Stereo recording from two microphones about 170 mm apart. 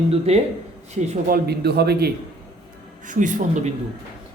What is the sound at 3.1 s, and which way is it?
Speech, 50° right (ahead or behind).